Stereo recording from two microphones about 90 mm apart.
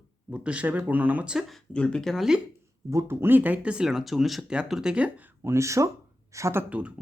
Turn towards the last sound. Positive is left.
turn(degrees=-15)  # may be behind; listen again after turning